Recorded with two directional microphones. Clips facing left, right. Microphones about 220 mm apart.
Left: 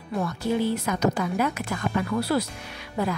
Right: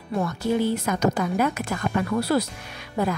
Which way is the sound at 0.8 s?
45° right (ahead or behind).